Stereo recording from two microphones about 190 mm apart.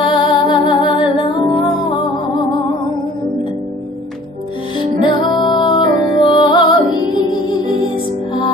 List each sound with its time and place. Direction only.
0.0 s music: 25° left (ahead or behind)
4.7 s music: 25° left (ahead or behind)